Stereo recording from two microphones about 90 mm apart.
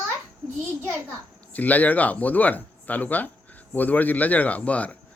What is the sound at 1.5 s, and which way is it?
Speech, 20° left (ahead or behind).